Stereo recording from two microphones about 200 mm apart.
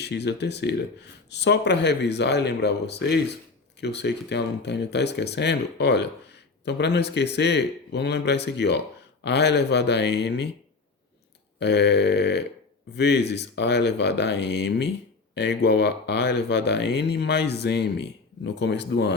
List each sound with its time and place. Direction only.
0.0 s speech: 55° left (ahead or behind)
11.6 s speech: 55° left (ahead or behind)